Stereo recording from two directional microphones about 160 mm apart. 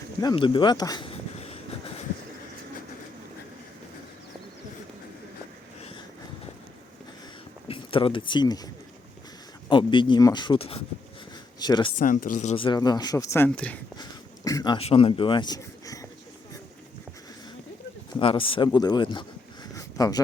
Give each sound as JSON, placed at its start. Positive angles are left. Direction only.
{"t": 0.2, "sound": "speech", "side_deg": 25}
{"t": 7.7, "sound": "speech", "side_deg": 35}
{"t": 11.6, "sound": "speech", "side_deg": 25}
{"t": 11.9, "sound": "speech", "side_deg": 55}
{"t": 12.5, "sound": "speech", "side_deg": 30}
{"t": 13.9, "sound": "a sound", "side_deg": 25}
{"t": 14.8, "sound": "speech", "side_deg": 35}
{"t": 18.2, "sound": "speech", "side_deg": 35}
{"t": 19.7, "sound": "a sound", "side_deg": 20}